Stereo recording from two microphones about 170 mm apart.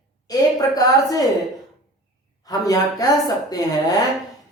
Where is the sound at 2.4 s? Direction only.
20° left (ahead or behind).